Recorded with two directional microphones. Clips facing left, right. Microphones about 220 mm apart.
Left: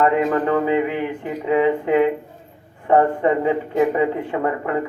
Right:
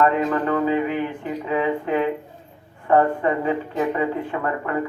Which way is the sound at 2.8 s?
20° left (ahead or behind).